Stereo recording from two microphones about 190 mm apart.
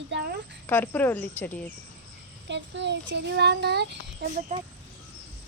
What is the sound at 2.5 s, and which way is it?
A child's voice, 65° right (ahead or behind).